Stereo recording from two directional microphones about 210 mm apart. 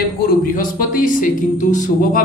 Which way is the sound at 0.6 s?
40° left (ahead or behind).